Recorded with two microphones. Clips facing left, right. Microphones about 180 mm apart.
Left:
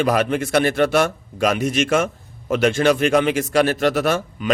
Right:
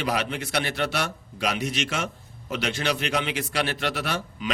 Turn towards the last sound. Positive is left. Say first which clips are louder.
# left 9 dB
turn(degrees=45)  # may be behind; listen again after turning